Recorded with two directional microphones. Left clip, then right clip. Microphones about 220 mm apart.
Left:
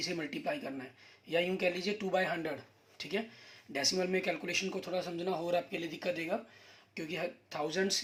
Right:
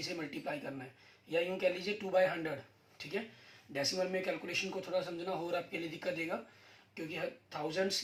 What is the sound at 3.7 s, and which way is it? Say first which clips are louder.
A man's voice: left 3 dB; 50° left (ahead or behind).